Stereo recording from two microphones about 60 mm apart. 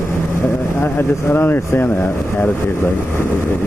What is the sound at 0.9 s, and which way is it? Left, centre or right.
Speech, left.